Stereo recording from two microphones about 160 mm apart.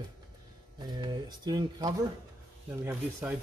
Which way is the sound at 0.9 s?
25° right (ahead or behind).